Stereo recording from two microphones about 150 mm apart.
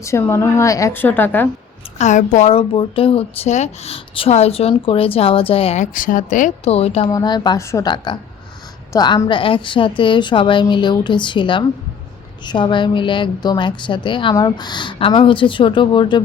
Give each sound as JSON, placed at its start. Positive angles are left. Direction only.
{"t": 0.0, "sound": "a woman's voice", "side_deg": 15}
{"t": 2.0, "sound": "a woman's voice", "side_deg": 55}
{"t": 2.5, "sound": "a woman's voice", "side_deg": 35}
{"t": 5.8, "sound": "speech", "side_deg": 65}
{"t": 7.1, "sound": "a woman's voice", "side_deg": 25}